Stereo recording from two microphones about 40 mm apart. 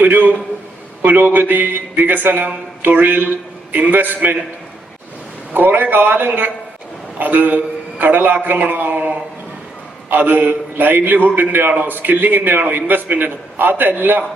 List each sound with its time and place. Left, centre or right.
0.0 s a man's voice: right
5.5 s a man's voice: right
10.1 s a man's voice: right